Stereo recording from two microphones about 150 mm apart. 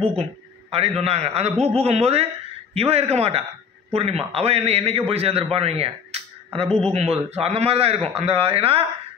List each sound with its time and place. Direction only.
0.0 s a man's voice: 40° right (ahead or behind)